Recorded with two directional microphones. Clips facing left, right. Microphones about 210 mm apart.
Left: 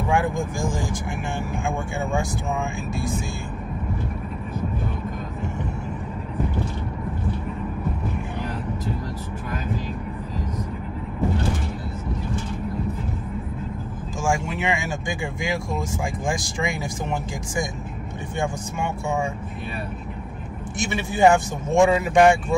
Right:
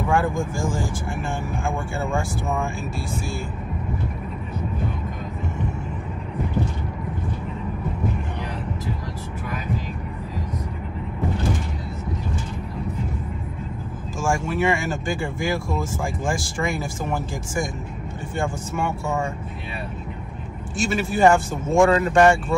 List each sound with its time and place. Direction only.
0.1 s vehicle: 15° left (ahead or behind)
2.0 s speech: 15° left (ahead or behind)
14.2 s speech: 15° left (ahead or behind)
20.7 s speech: 20° left (ahead or behind)